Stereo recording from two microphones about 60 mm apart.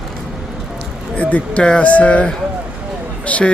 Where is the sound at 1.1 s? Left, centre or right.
Left.